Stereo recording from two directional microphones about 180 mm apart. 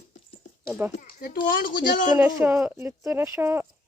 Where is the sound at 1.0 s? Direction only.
60° left (ahead or behind).